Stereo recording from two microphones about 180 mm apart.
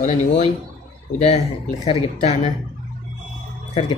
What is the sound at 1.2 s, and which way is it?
Speech, 40° left (ahead or behind).